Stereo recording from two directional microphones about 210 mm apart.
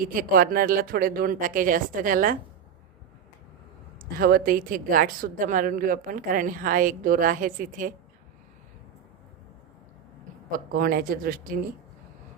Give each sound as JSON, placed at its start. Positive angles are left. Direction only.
{"t": 0.1, "sound": "speech", "side_deg": -45}
{"t": 3.9, "sound": "a woman's voice", "side_deg": -45}
{"t": 10.5, "sound": "speech", "side_deg": -40}